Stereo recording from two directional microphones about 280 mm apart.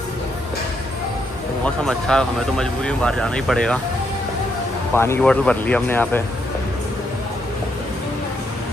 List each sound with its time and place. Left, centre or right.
1.6 s speech: centre
4.9 s speech: centre